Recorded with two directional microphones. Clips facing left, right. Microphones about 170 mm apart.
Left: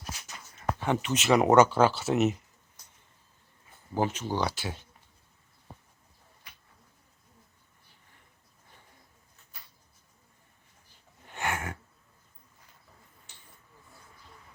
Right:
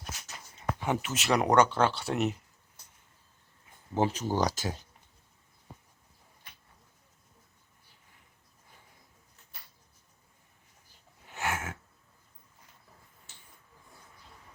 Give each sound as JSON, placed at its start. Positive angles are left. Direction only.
{"t": 0.8, "sound": "speech", "side_deg": -5}
{"t": 3.9, "sound": "speech", "side_deg": -35}
{"t": 11.3, "sound": "a sound", "side_deg": -5}